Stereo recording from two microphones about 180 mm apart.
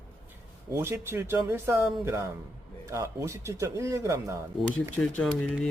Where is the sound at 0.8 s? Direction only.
15° right (ahead or behind).